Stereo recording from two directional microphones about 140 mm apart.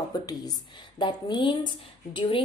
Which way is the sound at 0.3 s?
30° left (ahead or behind).